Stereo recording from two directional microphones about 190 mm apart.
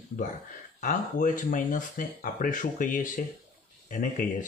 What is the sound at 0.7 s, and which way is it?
Speech, 45° left (ahead or behind).